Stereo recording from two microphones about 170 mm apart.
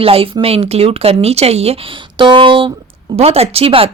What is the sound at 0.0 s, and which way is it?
A woman's voice, 35° right (ahead or behind).